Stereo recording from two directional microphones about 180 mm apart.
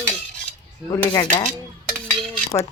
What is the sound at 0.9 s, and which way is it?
Speech, 25° left (ahead or behind).